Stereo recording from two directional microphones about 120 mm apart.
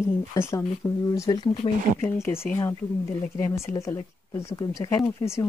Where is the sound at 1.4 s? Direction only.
45° left (ahead or behind).